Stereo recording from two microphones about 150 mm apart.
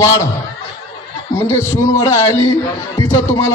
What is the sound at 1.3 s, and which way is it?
A man's voice, 20° left (ahead or behind).